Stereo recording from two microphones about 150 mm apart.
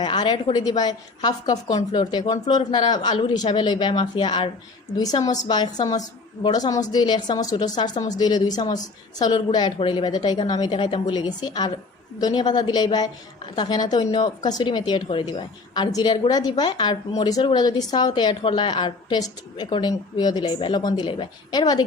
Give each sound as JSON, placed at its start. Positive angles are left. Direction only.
{"t": 0.0, "sound": "a woman's voice", "side_deg": 30}